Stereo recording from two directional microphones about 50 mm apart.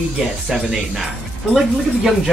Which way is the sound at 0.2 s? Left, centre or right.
Centre.